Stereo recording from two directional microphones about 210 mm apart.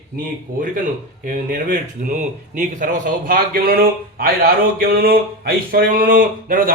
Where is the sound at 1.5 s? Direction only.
35° right (ahead or behind).